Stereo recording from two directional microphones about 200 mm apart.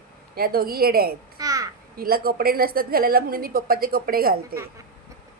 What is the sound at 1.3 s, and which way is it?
Babbling, 15° right (ahead or behind).